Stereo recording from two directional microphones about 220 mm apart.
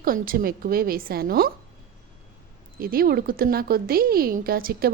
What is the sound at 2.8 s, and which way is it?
A woman's voice, 40° right (ahead or behind).